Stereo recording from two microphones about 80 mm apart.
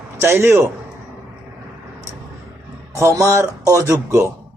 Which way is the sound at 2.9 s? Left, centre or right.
Right.